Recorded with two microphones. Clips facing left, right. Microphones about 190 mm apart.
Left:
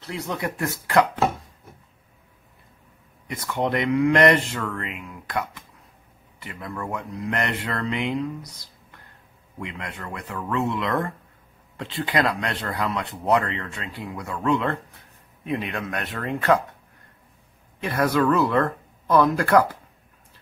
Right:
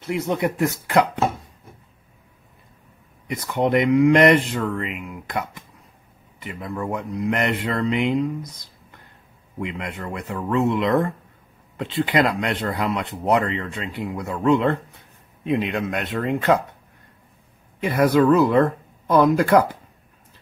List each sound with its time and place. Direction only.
0.0 s speech: 20° right (ahead or behind)
3.3 s speech: 15° right (ahead or behind)
6.4 s speech: 15° right (ahead or behind)
17.8 s speech: 15° right (ahead or behind)